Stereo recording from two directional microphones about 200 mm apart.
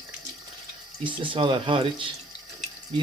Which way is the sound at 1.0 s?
25° right (ahead or behind).